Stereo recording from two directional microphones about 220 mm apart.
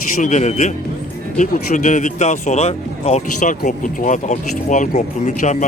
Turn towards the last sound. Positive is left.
turn(degrees=35)  # may be behind; listen again after turning